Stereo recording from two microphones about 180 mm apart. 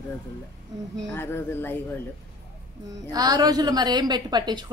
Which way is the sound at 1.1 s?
10° left (ahead or behind).